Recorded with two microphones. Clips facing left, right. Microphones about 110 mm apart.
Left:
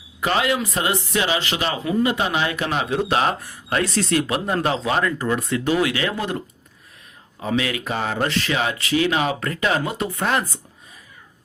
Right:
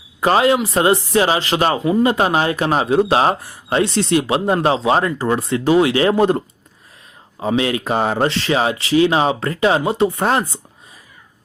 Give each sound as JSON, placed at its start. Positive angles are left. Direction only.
{"t": 0.2, "sound": "speech", "side_deg": -35}